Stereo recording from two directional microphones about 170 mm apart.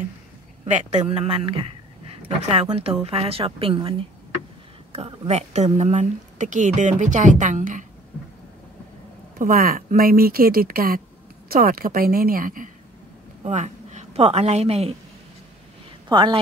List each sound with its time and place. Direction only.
0.7 s speech: 45° right (ahead or behind)
4.9 s speech: 35° right (ahead or behind)
9.4 s speech: 55° right (ahead or behind)
13.4 s a woman's voice: 45° right (ahead or behind)
16.1 s a woman's voice: 25° right (ahead or behind)